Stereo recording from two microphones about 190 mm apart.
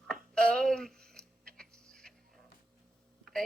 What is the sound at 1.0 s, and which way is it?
Creak, 5° left (ahead or behind).